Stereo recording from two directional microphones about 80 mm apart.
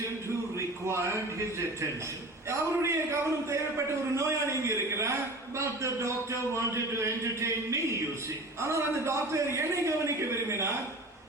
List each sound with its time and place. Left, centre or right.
0.9 s a man's voice: right